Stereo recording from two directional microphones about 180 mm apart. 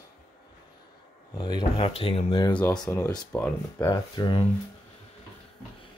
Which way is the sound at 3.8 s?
20° left (ahead or behind).